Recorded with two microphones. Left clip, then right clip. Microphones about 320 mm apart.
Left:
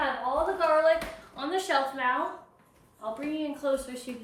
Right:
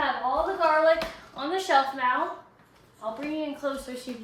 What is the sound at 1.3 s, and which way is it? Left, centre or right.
Speech, centre.